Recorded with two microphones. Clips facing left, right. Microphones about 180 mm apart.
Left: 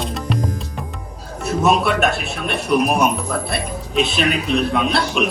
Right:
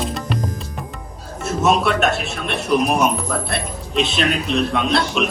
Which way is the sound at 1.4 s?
Centre (ahead or behind).